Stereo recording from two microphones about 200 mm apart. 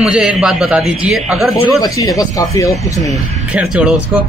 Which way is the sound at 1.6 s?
15° left (ahead or behind).